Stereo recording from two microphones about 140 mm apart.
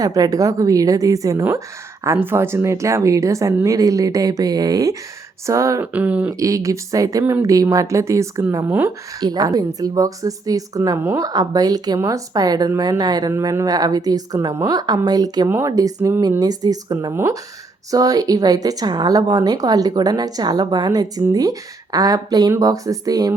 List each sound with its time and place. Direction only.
0.0 s speech: 25° right (ahead or behind)
5.9 s speech: 10° right (ahead or behind)
6.4 s speech: 25° right (ahead or behind)
9.2 s speech: 30° right (ahead or behind)